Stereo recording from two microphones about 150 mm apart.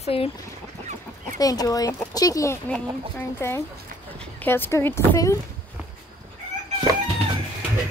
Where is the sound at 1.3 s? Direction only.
25° left (ahead or behind).